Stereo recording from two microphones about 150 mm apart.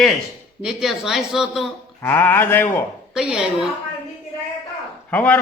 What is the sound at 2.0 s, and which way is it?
Speech, 15° left (ahead or behind).